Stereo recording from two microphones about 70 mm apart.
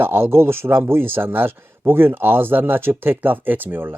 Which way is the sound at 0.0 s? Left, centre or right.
Right.